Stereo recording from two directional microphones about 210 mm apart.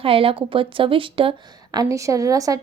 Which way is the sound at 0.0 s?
25° right (ahead or behind).